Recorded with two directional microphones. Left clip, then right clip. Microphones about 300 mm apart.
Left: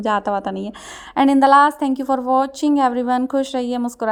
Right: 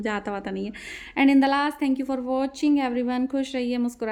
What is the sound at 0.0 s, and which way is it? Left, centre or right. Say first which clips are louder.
A woman's voice: left 10 dB; centre.